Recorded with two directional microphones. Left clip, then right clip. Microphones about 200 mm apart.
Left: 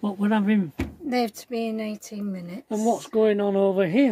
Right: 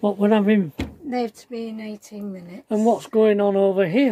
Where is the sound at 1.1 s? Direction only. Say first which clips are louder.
Left 1 dB; 50° left (ahead or behind).